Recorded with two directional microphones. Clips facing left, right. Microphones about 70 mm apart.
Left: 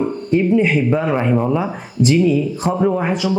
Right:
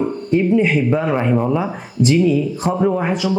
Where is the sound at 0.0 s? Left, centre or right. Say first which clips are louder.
Even; left.